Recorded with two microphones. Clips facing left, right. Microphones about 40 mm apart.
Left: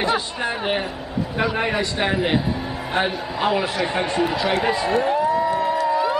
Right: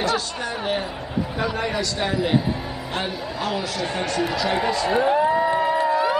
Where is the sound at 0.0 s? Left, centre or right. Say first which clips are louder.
Left 2 dB; left.